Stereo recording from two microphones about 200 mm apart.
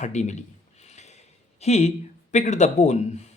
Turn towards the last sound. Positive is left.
turn(degrees=35)  # may be behind; listen again after turning